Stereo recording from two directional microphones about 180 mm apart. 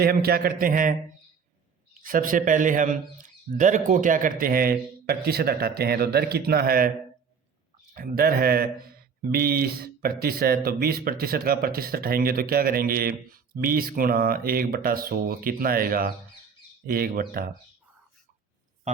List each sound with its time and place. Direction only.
0.0 s speech: 60° right (ahead or behind)
2.0 s a man's voice: 50° right (ahead or behind)
7.9 s speech: 55° right (ahead or behind)